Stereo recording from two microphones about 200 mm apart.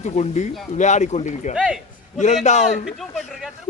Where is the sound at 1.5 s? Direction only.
5° right (ahead or behind).